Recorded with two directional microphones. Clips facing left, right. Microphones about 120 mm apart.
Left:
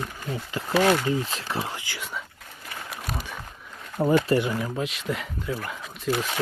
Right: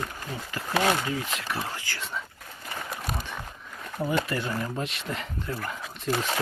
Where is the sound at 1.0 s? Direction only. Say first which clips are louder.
Left 4 dB; 30° left (ahead or behind); by 2.2 s 10° left (ahead or behind).